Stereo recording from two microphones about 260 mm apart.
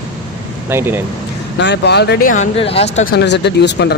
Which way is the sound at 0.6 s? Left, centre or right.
Centre.